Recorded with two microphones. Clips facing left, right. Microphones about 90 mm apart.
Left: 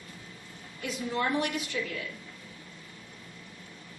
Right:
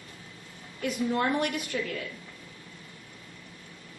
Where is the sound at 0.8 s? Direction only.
50° right (ahead or behind).